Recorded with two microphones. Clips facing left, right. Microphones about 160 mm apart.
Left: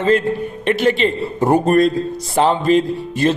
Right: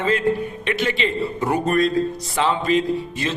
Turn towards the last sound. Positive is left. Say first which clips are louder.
# left 6 dB
turn(degrees=45)  # may be behind; listen again after turning